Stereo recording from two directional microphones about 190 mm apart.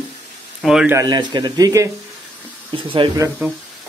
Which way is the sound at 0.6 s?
5° right (ahead or behind).